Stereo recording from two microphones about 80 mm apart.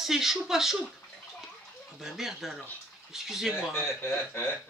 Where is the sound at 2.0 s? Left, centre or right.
Centre.